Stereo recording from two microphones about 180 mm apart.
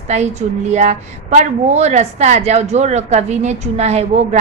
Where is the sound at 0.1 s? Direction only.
40° right (ahead or behind).